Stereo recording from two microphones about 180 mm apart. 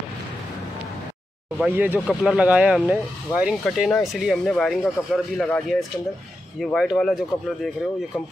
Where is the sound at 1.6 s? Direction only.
10° right (ahead or behind).